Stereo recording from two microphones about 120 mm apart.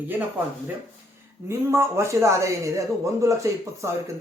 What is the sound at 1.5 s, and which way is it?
Speech, 25° right (ahead or behind).